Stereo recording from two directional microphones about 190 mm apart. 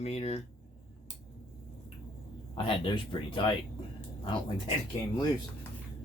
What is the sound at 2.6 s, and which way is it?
Speech, 25° left (ahead or behind).